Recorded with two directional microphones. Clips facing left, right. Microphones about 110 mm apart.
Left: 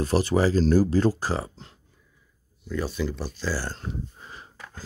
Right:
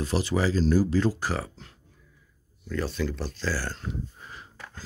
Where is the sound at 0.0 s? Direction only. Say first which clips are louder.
Left 4 dB; 45° left (ahead or behind).